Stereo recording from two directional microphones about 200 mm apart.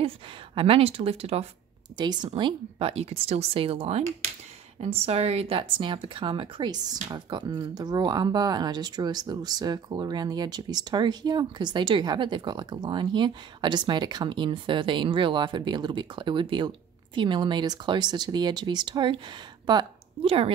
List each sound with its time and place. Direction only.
0.6 s speech: 30° right (ahead or behind)